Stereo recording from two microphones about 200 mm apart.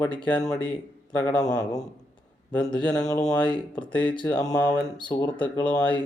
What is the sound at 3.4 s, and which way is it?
Speech, 25° left (ahead or behind).